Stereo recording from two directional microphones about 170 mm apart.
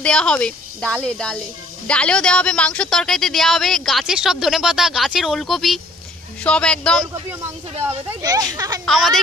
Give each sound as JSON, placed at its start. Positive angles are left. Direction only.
{"t": 0.0, "sound": "speech", "side_deg": 5}
{"t": 8.2, "sound": "speech", "side_deg": -20}
{"t": 8.8, "sound": "speech", "side_deg": 0}